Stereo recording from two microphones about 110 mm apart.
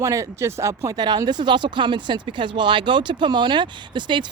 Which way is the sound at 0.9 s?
40° right (ahead or behind).